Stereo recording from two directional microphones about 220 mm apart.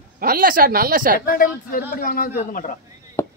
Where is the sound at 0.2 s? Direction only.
40° right (ahead or behind).